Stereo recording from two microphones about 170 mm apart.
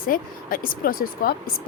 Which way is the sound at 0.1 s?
55° left (ahead or behind).